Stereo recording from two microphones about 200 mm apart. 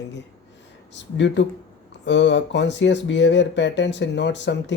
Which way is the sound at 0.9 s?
65° left (ahead or behind).